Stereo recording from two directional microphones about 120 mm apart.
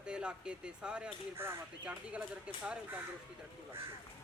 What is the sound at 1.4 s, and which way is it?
Speech, 20° right (ahead or behind).